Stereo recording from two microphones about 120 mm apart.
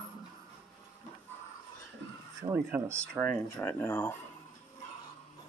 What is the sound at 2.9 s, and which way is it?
Speech, 10° left (ahead or behind).